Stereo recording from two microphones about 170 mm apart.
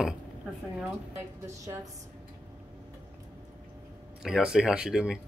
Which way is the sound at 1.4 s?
15° right (ahead or behind).